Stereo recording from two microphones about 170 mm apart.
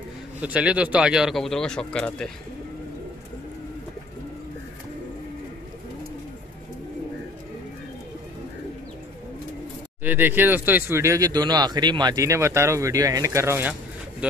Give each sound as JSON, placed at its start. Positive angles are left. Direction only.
{"t": 0.4, "sound": "speech", "side_deg": -5}
{"t": 10.0, "sound": "speech", "side_deg": -10}